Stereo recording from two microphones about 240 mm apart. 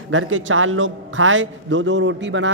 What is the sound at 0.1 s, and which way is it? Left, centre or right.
A man's voice, right.